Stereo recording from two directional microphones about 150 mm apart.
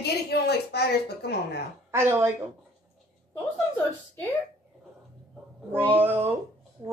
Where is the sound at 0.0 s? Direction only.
90° left.